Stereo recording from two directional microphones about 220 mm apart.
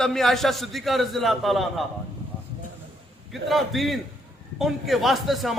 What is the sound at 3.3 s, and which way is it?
A man's voice, centre (ahead or behind).